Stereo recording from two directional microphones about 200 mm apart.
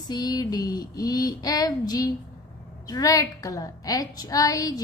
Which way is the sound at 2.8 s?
20° left (ahead or behind).